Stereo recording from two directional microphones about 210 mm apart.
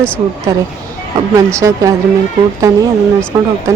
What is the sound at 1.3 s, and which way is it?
Speech, 15° right (ahead or behind).